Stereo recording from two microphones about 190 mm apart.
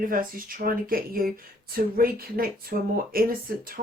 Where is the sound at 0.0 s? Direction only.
50° right (ahead or behind).